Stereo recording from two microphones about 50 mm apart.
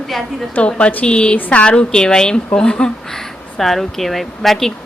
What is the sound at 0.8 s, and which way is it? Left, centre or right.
A woman's voice, left.